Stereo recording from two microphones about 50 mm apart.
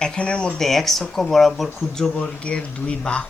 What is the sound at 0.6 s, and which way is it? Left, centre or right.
Speech, centre.